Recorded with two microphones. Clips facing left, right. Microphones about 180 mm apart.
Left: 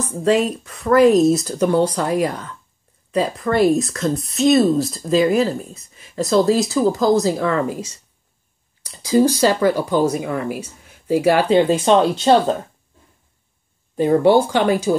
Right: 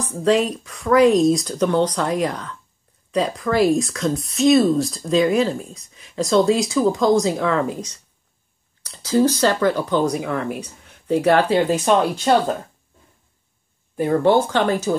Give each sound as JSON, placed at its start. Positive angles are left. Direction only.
{"t": 0.2, "sound": "speech", "side_deg": 0}
{"t": 8.8, "sound": "speech", "side_deg": 15}
{"t": 11.4, "sound": "speech", "side_deg": 20}
{"t": 14.0, "sound": "speech", "side_deg": 15}